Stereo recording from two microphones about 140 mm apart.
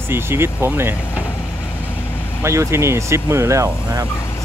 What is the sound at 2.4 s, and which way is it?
Speech, 20° right (ahead or behind).